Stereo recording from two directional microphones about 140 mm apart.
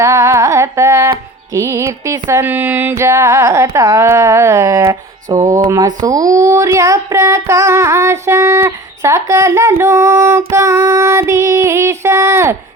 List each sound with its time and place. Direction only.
0.0 s carnatic music: 20° right (ahead or behind)
1.5 s speech: 20° right (ahead or behind)